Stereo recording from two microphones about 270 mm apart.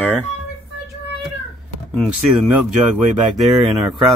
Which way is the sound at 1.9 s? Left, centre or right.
Centre.